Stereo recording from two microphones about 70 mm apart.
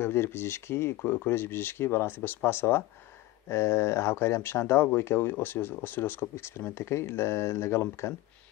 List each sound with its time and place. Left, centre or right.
0.0 s speech: left